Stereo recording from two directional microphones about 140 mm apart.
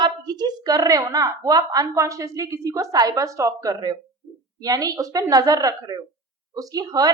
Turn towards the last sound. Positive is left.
turn(degrees=-25)  # may be behind; listen again after turning